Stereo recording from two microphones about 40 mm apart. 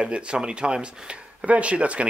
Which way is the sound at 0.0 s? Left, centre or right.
Right.